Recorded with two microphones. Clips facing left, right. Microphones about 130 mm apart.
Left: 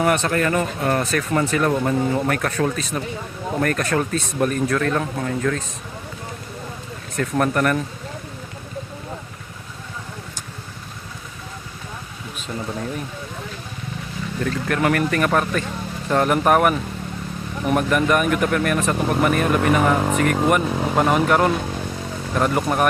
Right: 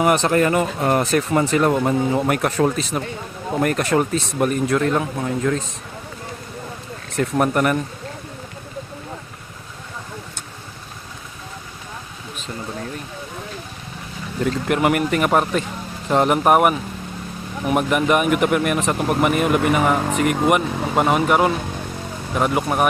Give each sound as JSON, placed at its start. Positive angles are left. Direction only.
{"t": 0.2, "sound": "speech", "side_deg": -25}
{"t": 7.2, "sound": "speech", "side_deg": -15}
{"t": 14.4, "sound": "speech", "side_deg": -15}